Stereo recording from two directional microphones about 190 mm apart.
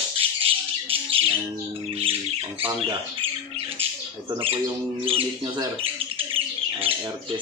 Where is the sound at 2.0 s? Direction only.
30° right (ahead or behind).